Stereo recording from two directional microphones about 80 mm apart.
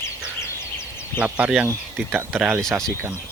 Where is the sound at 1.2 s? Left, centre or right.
Centre.